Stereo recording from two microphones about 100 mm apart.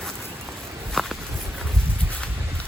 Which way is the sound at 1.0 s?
5° left (ahead or behind).